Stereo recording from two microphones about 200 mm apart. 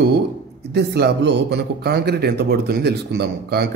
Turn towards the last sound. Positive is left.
turn(degrees=-55)  # may be behind; listen again after turning